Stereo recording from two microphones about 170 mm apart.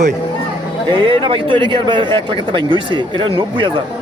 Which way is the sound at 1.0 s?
30° right (ahead or behind).